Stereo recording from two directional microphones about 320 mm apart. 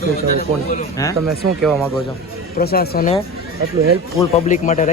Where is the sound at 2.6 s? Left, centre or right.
Left.